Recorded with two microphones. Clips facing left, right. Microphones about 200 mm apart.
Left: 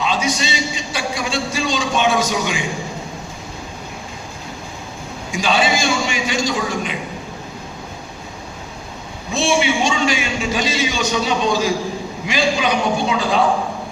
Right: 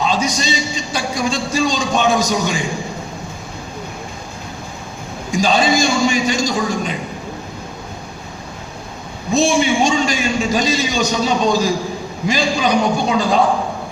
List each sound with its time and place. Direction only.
0.0 s a sound: 40° right (ahead or behind)
0.9 s a man's voice: 40° right (ahead or behind)
5.3 s a man's voice: 40° right (ahead or behind)
9.3 s a man's voice: 40° right (ahead or behind)